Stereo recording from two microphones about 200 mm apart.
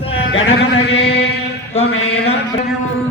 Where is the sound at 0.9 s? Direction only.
30° left (ahead or behind).